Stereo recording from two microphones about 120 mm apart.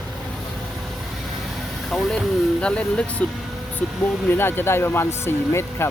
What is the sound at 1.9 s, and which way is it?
Speech, centre (ahead or behind).